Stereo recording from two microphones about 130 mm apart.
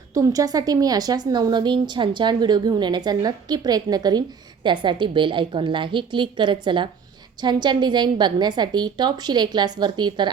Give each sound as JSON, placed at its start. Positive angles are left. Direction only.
{"t": 0.1, "sound": "a woman's voice", "side_deg": -25}